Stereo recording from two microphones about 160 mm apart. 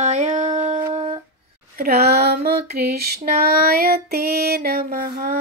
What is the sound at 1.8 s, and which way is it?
Female singing, 75° right (ahead or behind).